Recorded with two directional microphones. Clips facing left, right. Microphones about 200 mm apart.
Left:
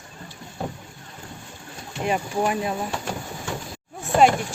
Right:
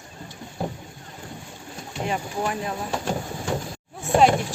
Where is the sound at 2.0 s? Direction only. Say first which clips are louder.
Left 4 dB; 15° left (ahead or behind).